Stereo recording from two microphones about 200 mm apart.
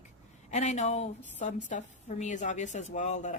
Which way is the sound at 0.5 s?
35° left (ahead or behind).